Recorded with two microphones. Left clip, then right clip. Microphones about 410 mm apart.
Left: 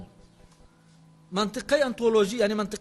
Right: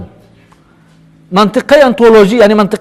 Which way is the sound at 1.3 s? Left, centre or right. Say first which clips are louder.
Right 18 dB; right.